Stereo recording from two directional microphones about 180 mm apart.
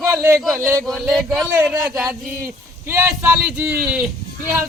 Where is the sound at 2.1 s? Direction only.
15° right (ahead or behind).